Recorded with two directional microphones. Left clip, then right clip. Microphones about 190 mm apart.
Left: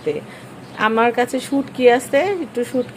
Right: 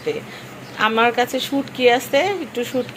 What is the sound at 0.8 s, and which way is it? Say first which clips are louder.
A woman's voice: even; 25° left (ahead or behind).